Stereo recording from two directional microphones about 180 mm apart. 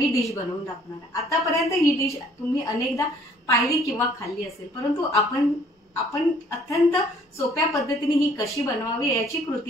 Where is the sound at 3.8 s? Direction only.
15° left (ahead or behind).